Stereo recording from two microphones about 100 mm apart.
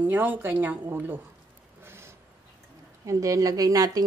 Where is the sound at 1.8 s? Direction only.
25° right (ahead or behind).